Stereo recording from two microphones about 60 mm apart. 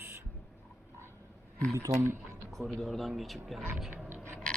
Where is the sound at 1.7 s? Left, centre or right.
Right.